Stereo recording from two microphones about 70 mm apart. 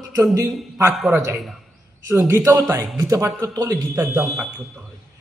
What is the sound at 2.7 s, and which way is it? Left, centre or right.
Speech, right.